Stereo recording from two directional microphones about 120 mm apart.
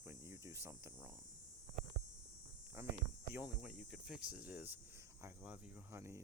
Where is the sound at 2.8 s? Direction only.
20° right (ahead or behind).